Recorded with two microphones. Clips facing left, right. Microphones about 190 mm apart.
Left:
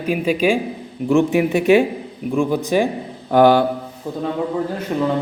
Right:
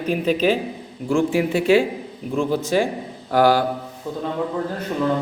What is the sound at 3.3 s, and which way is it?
Mantra, 20° left (ahead or behind).